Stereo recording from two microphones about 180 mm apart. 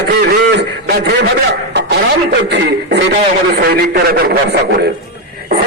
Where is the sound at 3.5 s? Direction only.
65° right (ahead or behind).